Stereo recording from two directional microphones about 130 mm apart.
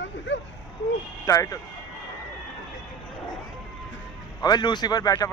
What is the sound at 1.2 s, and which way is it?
Speech, 25° left (ahead or behind).